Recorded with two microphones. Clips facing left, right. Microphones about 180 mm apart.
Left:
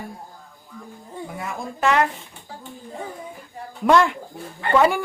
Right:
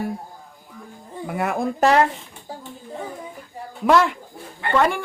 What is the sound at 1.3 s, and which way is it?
Speech, 65° right (ahead or behind).